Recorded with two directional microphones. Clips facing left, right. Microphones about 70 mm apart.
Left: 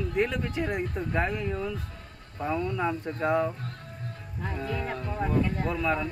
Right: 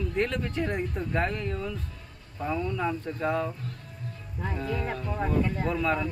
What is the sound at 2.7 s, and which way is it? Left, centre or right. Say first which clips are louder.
Speech: left 1 dB; centre.